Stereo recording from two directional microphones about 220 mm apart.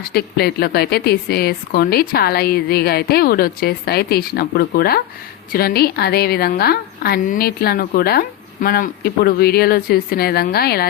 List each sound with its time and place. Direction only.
0.0 s a woman's voice: 45° left (ahead or behind)